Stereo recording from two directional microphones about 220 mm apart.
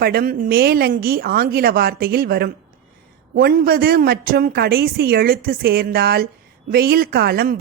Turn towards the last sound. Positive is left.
turn(degrees=-45)  # may be behind; listen again after turning